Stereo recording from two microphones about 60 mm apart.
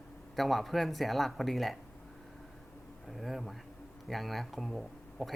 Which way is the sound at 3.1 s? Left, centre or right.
Centre.